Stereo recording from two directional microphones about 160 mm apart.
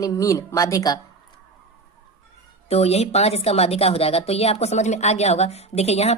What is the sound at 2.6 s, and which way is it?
A woman's voice, 40° left (ahead or behind).